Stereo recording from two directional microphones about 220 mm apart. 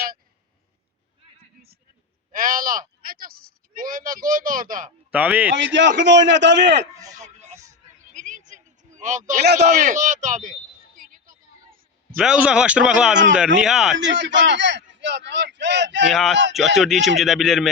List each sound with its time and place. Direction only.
2.3 s speech: 40° right (ahead or behind)
5.1 s a man's voice: 5° right (ahead or behind)
6.0 s a man's voice: 55° right (ahead or behind)
6.9 s a sound: 15° right (ahead or behind)
7.3 s music: 30° right (ahead or behind)
8.1 s a sound: 35° right (ahead or behind)
12.1 s speech: 5° right (ahead or behind)
14.0 s a man's voice: 55° right (ahead or behind)
16.1 s speech: centre (ahead or behind)